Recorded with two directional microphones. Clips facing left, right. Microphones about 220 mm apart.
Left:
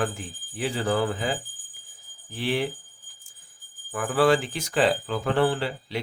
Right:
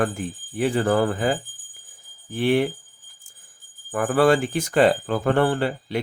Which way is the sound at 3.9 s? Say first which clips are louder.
Right 3 dB; 50° right (ahead or behind).